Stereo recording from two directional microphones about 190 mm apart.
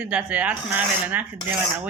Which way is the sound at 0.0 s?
5° right (ahead or behind).